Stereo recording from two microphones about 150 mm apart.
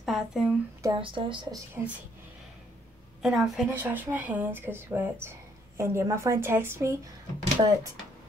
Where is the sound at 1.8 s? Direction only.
10° right (ahead or behind).